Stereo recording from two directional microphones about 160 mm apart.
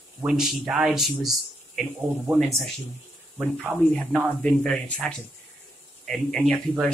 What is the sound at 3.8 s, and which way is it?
Speech, 5° left (ahead or behind).